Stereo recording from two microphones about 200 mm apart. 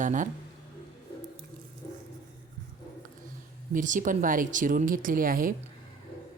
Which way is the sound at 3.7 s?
40° right (ahead or behind).